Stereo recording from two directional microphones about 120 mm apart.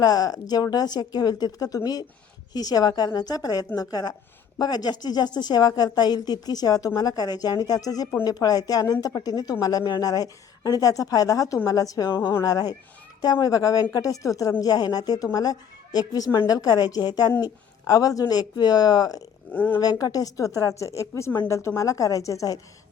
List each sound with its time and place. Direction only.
0.0 s a woman's voice: 30° left (ahead or behind)
19.5 s speech: 15° left (ahead or behind)
19.8 s a woman's voice: 30° left (ahead or behind)